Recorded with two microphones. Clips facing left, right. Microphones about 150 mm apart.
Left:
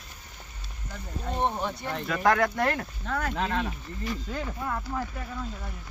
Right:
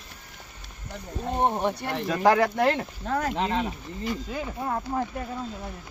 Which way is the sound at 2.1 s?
30° right (ahead or behind).